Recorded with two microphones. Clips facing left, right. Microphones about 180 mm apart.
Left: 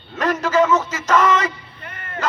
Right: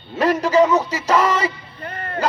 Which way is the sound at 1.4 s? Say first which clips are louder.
Right 2 dB; 35° right (ahead or behind).